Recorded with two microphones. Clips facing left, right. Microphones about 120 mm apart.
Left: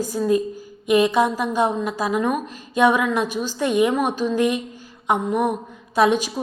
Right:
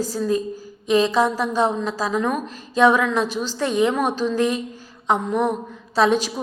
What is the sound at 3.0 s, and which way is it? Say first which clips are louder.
Speech: even; 50° left (ahead or behind).